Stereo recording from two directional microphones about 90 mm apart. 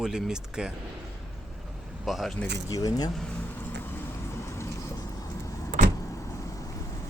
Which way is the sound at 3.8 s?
30° left (ahead or behind).